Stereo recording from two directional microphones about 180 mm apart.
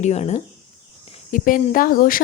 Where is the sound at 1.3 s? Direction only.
45° left (ahead or behind).